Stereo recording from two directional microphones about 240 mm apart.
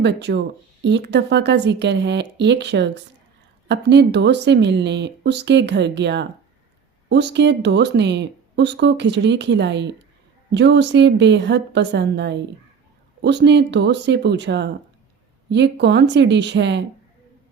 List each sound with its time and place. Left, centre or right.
0.0 s speech: right